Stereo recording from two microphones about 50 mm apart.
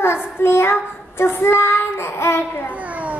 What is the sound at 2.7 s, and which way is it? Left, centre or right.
Children playing, right.